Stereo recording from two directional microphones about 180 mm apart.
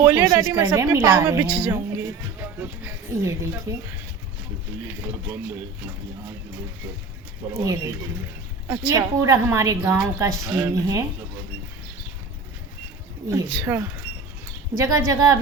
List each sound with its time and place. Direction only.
0.0 s a woman's voice: 15° right (ahead or behind)
7.5 s a woman's voice: 15° right (ahead or behind)
13.3 s a woman's voice: 15° right (ahead or behind)